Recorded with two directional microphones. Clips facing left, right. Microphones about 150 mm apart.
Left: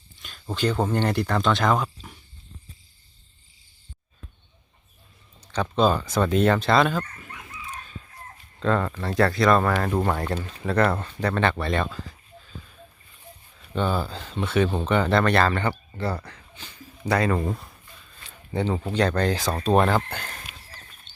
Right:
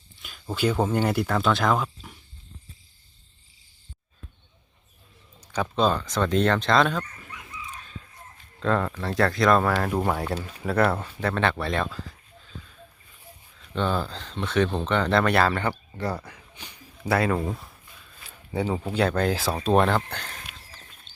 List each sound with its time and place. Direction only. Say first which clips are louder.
0.2 s speech: even; 5° right (ahead or behind)
5.4 s a sound: left 1 dB; 10° right (ahead or behind)
5.7 s speech: left 3 dB; 5° left (ahead or behind)
7.3 s chicken: even; 55° left (ahead or behind)
8.6 s speech: left 1 dB; centre (ahead or behind)
13.6 s speech: left 1 dB; 10° left (ahead or behind)
15.2 s speech: left 1 dB; 5° right (ahead or behind)